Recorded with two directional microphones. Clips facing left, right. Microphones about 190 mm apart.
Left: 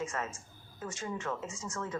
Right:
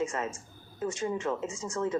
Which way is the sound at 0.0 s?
25° right (ahead or behind).